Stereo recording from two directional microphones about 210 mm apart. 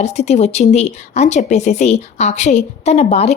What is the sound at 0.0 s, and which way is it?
A woman's voice, 30° left (ahead or behind).